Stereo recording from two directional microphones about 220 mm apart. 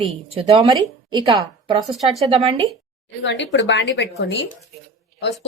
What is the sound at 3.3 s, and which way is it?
A woman's voice, 55° left (ahead or behind).